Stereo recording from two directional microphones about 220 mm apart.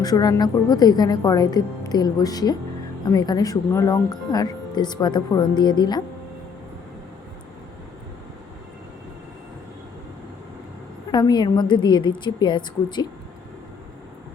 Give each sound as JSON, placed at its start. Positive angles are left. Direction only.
{"t": 0.0, "sound": "a woman's voice", "side_deg": 15}
{"t": 11.1, "sound": "speech", "side_deg": 20}